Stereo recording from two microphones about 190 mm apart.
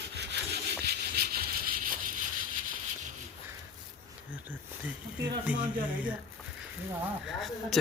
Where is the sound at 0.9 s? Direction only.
55° right (ahead or behind).